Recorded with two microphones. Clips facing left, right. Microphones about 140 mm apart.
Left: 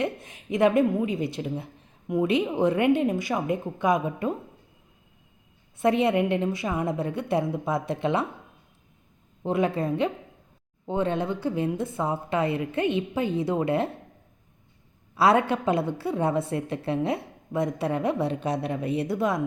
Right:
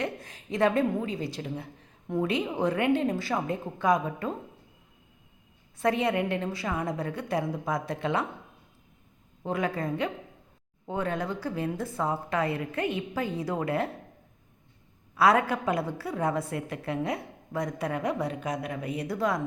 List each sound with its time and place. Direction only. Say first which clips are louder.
0.0 s a woman's voice: left 4 dB; 20° left (ahead or behind)
5.8 s a woman's voice: left 4 dB; 20° left (ahead or behind)
9.4 s a woman's voice: left 5 dB; 25° left (ahead or behind)
15.1 s a woman's voice: left 2 dB; 25° left (ahead or behind)